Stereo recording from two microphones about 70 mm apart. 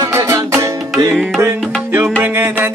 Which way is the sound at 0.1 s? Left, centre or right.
Right.